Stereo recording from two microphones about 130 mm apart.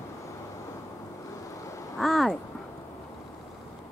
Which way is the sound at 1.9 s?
Centre (ahead or behind).